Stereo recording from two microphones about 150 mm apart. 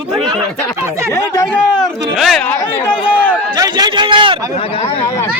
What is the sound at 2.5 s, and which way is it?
Speech, 10° left (ahead or behind).